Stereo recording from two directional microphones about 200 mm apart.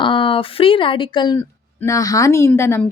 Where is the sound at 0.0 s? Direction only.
25° left (ahead or behind).